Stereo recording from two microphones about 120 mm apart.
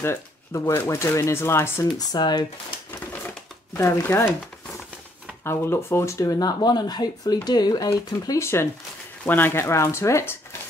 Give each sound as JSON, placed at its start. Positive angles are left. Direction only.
{"t": 0.0, "sound": "speech", "side_deg": 20}
{"t": 2.0, "sound": "speech", "side_deg": 35}
{"t": 3.7, "sound": "speech", "side_deg": 20}
{"t": 5.4, "sound": "speech", "side_deg": 20}